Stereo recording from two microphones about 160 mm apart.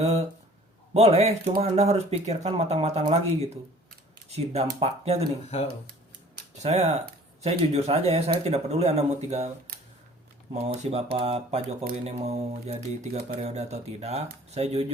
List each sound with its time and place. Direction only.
0.0 s speech: 45° right (ahead or behind)
6.6 s speech: 45° right (ahead or behind)
10.5 s speech: 40° right (ahead or behind)